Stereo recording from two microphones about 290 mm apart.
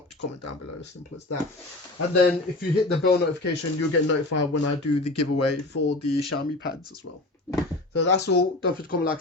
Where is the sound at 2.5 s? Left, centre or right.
Left.